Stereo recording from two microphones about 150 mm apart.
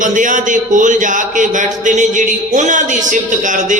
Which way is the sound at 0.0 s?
60° right (ahead or behind).